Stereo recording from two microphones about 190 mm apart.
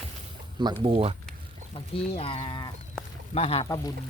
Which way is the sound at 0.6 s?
25° right (ahead or behind).